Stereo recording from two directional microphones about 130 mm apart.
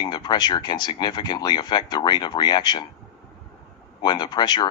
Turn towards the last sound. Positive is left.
turn(degrees=35)  # may be behind; listen again after turning